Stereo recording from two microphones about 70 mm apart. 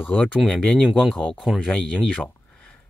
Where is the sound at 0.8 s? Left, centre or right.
Centre.